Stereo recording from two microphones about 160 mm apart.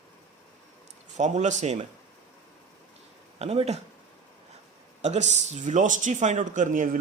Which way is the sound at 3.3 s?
40° right (ahead or behind).